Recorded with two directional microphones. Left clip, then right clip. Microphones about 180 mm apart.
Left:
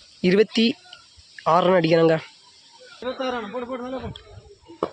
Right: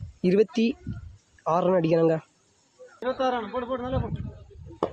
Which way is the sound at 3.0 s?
35° left (ahead or behind).